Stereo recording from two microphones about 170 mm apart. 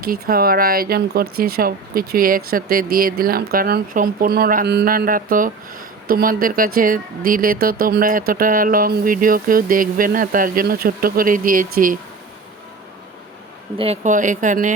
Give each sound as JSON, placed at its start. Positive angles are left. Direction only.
{"t": 0.0, "sound": "speech", "side_deg": -60}
{"t": 13.7, "sound": "speech", "side_deg": -35}